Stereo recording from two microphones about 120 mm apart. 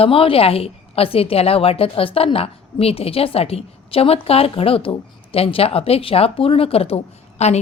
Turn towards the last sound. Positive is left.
turn(degrees=60)  # may be behind; listen again after turning